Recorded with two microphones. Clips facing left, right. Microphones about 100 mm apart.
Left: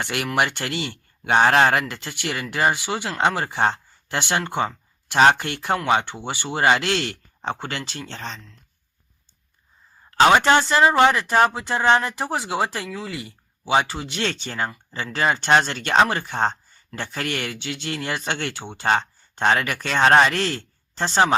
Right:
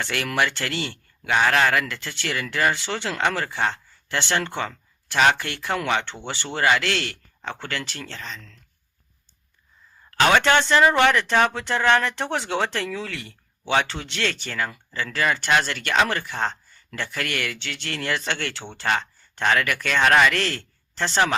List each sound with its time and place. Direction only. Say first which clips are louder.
0.0 s speech: left 1 dB; 15° left (ahead or behind)
1.3 s speech: left 3 dB; 35° left (ahead or behind)
1.8 s speech: left 1 dB; 20° left (ahead or behind)
3.7 s a sound: left 3 dB; 15° left (ahead or behind)
5.4 s speech: left 3 dB; 20° left (ahead or behind)
10.1 s speech: left 3 dB; 25° left (ahead or behind)
20.3 s speech: left 1 dB; 20° left (ahead or behind)